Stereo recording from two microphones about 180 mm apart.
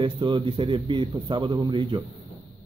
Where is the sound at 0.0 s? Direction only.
25° right (ahead or behind).